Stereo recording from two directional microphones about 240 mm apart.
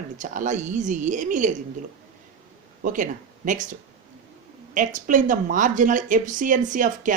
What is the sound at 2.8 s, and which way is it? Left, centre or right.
Speech, right.